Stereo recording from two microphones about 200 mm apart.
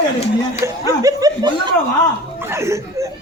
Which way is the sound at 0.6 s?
15° right (ahead or behind).